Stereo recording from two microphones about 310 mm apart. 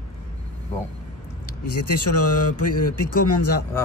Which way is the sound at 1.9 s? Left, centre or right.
Left.